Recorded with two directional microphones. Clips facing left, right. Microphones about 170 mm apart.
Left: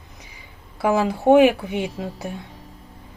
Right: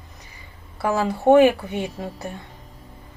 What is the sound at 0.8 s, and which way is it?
A woman's voice, 15° left (ahead or behind).